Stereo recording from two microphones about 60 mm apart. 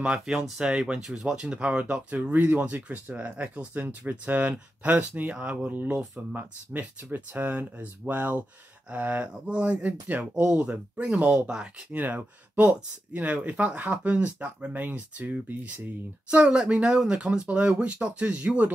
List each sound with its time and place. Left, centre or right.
0.0 s speech: centre
11.9 s speech: right